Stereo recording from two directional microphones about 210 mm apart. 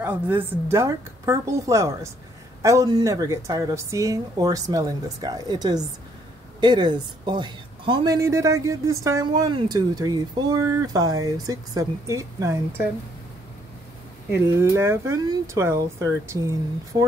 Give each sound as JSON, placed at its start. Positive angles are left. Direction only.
{"t": 0.0, "sound": "speech", "side_deg": -10}
{"t": 14.6, "sound": "speech", "side_deg": -10}